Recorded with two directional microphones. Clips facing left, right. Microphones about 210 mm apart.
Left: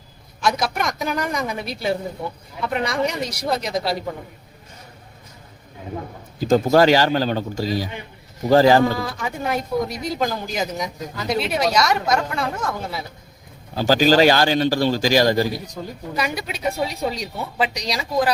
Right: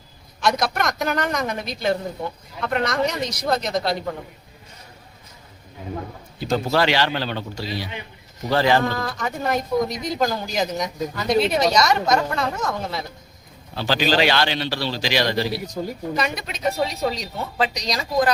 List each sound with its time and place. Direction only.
0.4 s a woman's voice: 5° left (ahead or behind)
6.4 s a man's voice: 45° left (ahead or behind)
8.9 s speech: 5° left (ahead or behind)
13.7 s a man's voice: 40° left (ahead or behind)
16.1 s a woman's voice: 10° left (ahead or behind)